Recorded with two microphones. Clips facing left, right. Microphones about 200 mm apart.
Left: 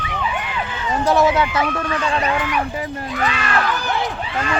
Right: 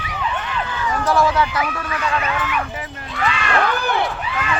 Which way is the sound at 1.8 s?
30° left (ahead or behind).